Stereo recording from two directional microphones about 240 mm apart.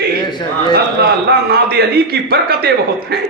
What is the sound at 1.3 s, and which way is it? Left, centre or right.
A man's voice, right.